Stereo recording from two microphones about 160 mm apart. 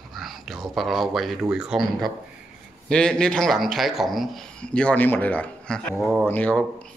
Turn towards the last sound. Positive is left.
turn(degrees=10)  # may be behind; listen again after turning